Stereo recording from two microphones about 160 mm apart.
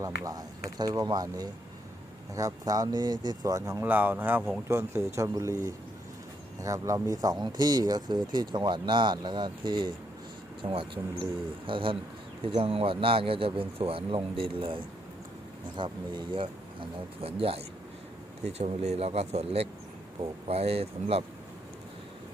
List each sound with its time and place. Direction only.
0.8 s speech: 25° right (ahead or behind)